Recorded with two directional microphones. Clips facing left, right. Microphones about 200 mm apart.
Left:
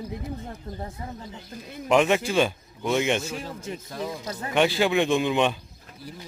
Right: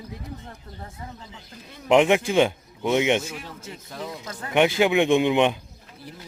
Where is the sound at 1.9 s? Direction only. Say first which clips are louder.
Right 3 dB; 20° right (ahead or behind).